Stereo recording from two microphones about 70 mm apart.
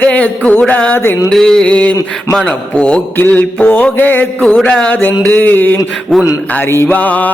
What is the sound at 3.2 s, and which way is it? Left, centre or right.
Mantra, left.